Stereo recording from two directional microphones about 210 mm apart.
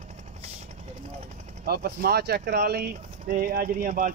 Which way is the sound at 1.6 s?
45° right (ahead or behind).